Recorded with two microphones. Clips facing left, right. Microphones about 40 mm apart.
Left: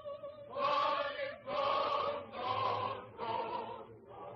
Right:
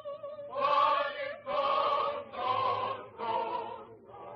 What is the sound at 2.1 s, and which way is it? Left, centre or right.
Choir, centre.